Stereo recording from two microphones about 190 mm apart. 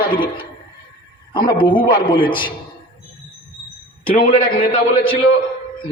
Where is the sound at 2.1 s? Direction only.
25° left (ahead or behind).